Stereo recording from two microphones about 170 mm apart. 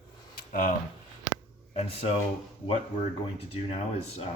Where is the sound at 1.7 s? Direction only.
40° left (ahead or behind).